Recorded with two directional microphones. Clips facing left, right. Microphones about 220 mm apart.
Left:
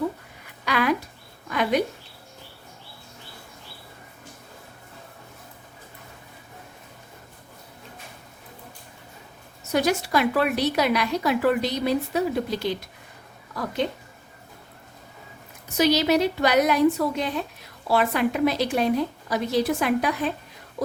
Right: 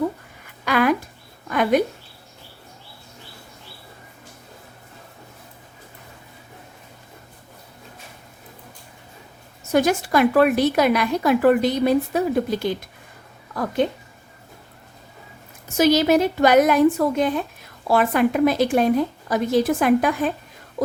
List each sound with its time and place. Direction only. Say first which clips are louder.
0.6 s a woman's voice: right 4 dB; 50° right (ahead or behind)
9.7 s a woman's voice: right 4 dB; 50° right (ahead or behind)
15.8 s a woman's voice: right 4 dB; 50° right (ahead or behind)